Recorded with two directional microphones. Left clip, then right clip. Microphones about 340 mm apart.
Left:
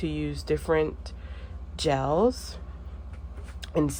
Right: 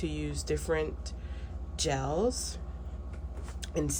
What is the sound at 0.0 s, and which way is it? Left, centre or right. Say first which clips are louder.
Speech: left 5 dB; centre.